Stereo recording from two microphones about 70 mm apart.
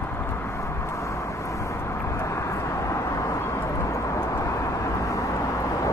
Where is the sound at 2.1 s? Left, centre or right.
Left.